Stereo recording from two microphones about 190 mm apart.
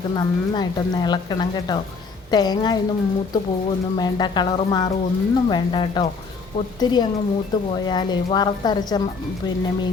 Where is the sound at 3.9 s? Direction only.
20° left (ahead or behind).